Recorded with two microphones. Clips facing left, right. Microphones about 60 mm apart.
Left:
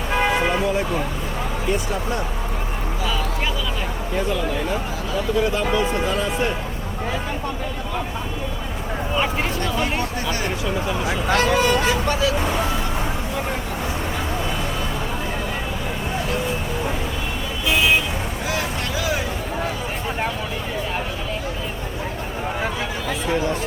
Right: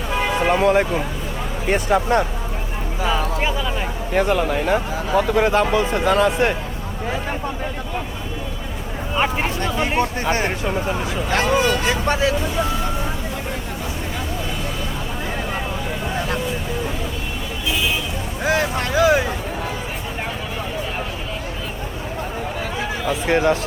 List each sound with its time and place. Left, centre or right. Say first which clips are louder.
0.4 s speech: right 5 dB; right
3.0 s a sound: right 5 dB; right
4.1 s speech: right 5 dB; right
9.1 s speech: right 3 dB; right
10.2 s speech: right 3 dB; right
18.4 s vehicle: right 7 dB; right
23.2 s speech: right 5 dB; right